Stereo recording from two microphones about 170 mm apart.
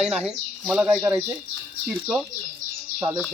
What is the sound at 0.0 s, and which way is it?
Speech, 5° right (ahead or behind).